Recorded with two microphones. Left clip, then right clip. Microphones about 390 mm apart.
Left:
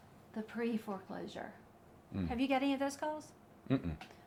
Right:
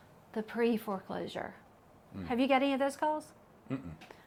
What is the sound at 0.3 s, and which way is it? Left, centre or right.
A woman's voice, right.